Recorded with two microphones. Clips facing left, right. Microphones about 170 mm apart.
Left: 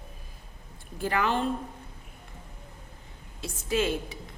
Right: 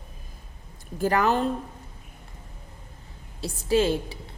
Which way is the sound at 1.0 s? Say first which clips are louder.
Right 5 dB; 40° right (ahead or behind).